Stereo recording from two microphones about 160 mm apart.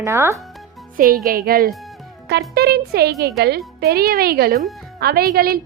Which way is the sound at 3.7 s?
75° right (ahead or behind).